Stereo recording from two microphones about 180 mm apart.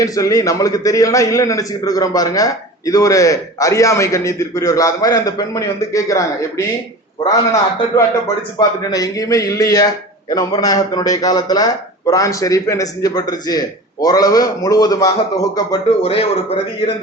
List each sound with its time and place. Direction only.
0.0 s a man's voice: 20° left (ahead or behind)